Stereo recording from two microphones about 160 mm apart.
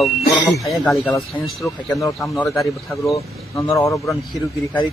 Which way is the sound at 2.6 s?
20° left (ahead or behind).